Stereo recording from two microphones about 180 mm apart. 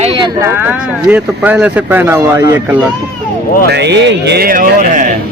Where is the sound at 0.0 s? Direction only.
35° right (ahead or behind).